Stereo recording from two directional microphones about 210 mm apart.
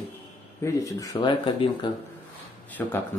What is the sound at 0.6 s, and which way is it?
Speech, 15° left (ahead or behind).